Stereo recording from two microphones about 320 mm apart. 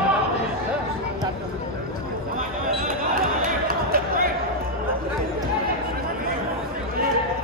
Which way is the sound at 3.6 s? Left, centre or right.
Right.